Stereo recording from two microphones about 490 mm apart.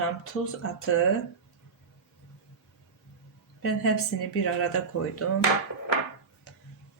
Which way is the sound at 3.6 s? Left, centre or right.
Left.